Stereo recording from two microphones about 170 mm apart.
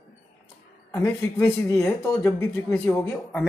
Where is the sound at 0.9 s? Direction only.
10° left (ahead or behind).